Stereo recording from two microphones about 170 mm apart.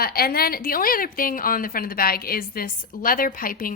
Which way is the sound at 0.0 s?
60° left (ahead or behind).